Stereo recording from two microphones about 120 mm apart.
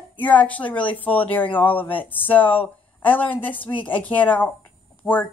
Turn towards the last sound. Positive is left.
turn(degrees=15)  # may be behind; listen again after turning